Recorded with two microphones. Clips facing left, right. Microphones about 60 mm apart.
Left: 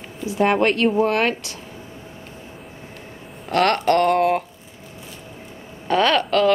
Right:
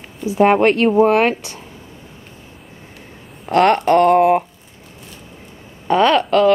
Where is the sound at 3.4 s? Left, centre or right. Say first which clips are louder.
Right 5 dB; centre.